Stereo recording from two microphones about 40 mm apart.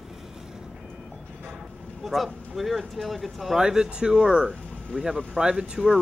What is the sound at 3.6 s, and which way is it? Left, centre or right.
Speech, centre.